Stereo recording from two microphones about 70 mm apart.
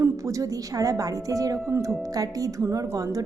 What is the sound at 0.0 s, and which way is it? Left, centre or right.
A woman's voice, right.